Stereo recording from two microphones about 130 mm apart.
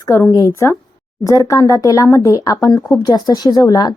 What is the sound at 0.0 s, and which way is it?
A woman's voice, 25° left (ahead or behind).